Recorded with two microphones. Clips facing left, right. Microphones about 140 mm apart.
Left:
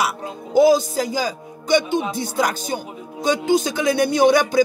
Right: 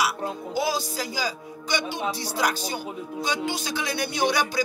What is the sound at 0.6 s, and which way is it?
Speech, 50° left (ahead or behind).